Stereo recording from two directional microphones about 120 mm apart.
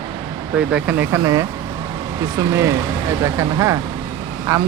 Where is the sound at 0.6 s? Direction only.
10° right (ahead or behind).